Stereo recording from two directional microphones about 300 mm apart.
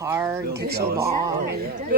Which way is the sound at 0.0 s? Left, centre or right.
Centre.